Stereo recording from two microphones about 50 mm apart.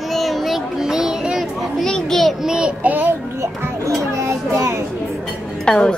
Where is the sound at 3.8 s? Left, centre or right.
Right.